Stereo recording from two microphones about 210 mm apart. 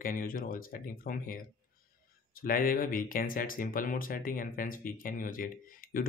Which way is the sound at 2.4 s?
45° left (ahead or behind).